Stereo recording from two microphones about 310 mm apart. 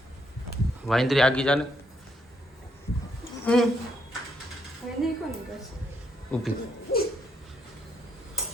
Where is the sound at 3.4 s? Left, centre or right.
Centre.